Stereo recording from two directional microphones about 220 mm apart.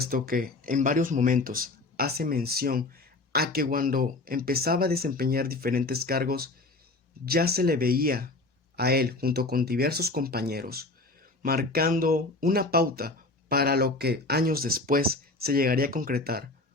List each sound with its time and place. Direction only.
0.0 s speech: 40° right (ahead or behind)